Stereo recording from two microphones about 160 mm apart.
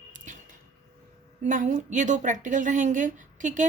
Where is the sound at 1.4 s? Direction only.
50° right (ahead or behind).